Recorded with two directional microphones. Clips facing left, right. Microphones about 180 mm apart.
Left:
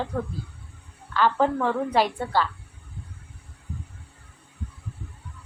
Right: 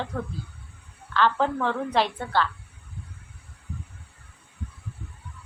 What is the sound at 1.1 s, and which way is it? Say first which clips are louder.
A woman's voice: left 1 dB; 10° left (ahead or behind).